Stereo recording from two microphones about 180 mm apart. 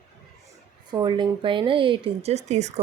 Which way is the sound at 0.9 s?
25° right (ahead or behind).